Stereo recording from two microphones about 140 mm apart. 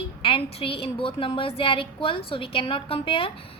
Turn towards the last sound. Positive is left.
turn(degrees=40)  # may be behind; listen again after turning